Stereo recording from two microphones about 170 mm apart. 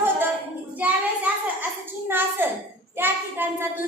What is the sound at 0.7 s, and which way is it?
A child's voice, 10° right (ahead or behind).